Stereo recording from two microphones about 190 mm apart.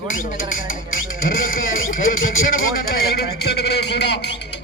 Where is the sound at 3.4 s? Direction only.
60° left (ahead or behind).